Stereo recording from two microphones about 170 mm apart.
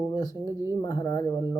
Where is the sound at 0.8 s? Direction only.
20° left (ahead or behind).